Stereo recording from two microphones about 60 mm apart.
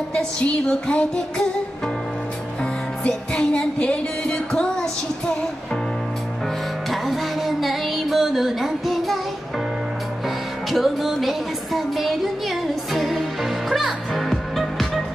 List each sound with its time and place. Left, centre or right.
0.1 s music: centre
3.8 s music: centre
6.9 s music: centre
10.7 s music: centre